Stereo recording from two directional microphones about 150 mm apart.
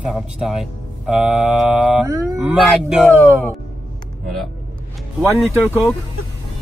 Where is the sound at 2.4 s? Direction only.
5° right (ahead or behind).